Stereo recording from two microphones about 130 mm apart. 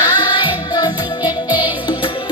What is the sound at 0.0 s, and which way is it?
Music, 35° left (ahead or behind).